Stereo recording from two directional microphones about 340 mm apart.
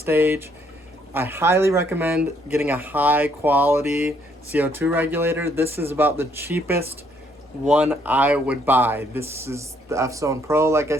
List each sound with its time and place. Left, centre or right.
0.0 s speech: centre